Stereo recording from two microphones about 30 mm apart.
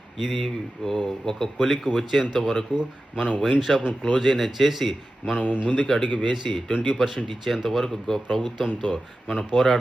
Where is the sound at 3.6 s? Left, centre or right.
Centre.